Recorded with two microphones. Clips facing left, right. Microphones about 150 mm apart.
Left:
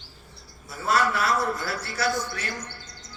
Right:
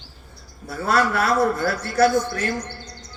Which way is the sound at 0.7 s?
60° right (ahead or behind).